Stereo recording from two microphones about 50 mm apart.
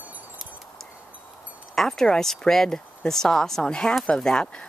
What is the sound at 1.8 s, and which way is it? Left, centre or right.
Speech, centre.